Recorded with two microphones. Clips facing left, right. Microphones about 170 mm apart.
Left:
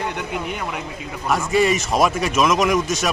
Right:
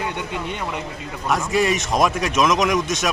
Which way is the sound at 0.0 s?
Centre (ahead or behind).